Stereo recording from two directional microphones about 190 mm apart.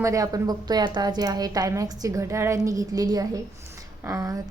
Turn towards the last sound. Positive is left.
turn(degrees=-15)  # may be behind; listen again after turning